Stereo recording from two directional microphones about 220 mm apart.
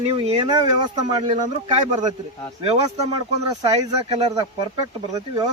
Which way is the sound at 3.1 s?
15° right (ahead or behind).